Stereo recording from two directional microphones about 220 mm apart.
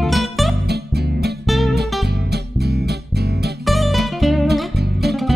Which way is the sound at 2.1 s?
50° right (ahead or behind).